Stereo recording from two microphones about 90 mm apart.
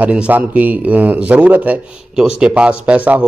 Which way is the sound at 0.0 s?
20° right (ahead or behind).